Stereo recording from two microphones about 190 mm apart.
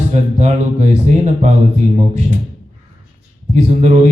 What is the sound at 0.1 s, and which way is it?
Speech, 35° right (ahead or behind).